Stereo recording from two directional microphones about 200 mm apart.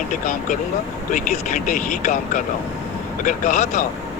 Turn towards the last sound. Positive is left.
turn(degrees=40)  # may be behind; listen again after turning